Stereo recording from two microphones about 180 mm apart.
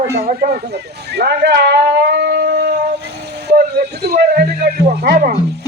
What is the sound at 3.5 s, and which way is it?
Music, 65° right (ahead or behind).